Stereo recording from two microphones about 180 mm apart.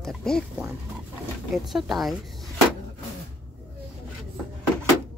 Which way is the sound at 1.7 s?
Centre (ahead or behind).